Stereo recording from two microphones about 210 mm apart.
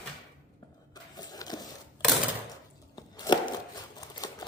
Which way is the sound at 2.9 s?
20° left (ahead or behind).